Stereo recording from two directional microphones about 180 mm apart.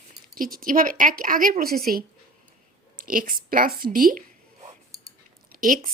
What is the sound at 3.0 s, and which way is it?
Speech, 50° right (ahead or behind).